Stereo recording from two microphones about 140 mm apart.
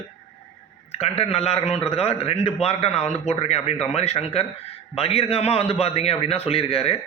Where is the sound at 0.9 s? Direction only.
45° left (ahead or behind).